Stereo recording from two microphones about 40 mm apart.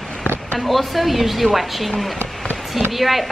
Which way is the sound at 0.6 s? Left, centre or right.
Centre.